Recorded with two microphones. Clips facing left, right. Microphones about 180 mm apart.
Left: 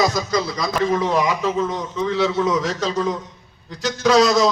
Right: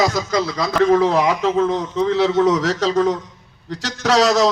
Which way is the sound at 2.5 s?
80° right.